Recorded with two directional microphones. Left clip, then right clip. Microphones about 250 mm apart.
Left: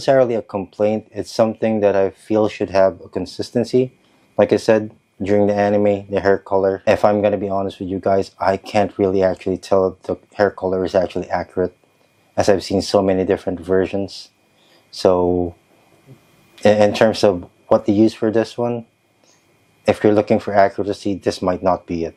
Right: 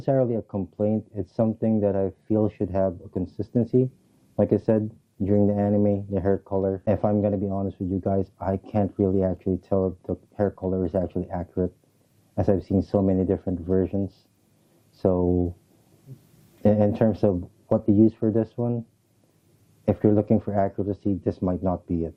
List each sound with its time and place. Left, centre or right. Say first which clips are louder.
0.0 s speech: left 9 dB; centre
2.8 s speech: left 10 dB; centre
3.2 s speech: left 7 dB; centre
9.7 s speech: left 10 dB; left
10.0 s speech: left 9 dB; centre
10.6 s speech: left 8 dB; centre
10.8 s speech: left 9 dB; centre
12.4 s speech: left 8 dB; centre
15.2 s speech: left 7 dB; left
16.6 s speech: left 9 dB; centre
17.3 s speech: left 9 dB; centre
17.8 s speech: left 5 dB; centre
19.8 s speech: left 8 dB; centre